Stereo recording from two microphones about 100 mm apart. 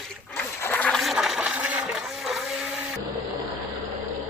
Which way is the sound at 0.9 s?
Centre (ahead or behind).